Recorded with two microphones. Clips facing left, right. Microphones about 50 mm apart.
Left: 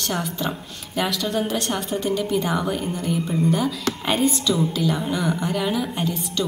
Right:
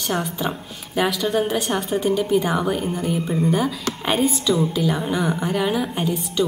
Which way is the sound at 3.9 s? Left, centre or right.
Centre.